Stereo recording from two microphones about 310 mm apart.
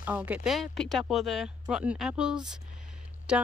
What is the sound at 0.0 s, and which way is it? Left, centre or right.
Speech, centre.